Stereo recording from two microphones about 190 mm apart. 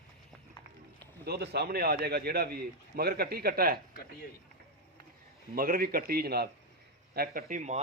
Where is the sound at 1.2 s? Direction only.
60° right (ahead or behind).